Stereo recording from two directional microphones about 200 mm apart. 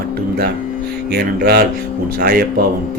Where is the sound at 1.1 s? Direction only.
55° right (ahead or behind).